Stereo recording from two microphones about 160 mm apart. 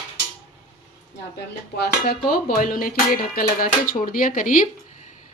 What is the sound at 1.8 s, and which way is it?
Dishes, 90° left.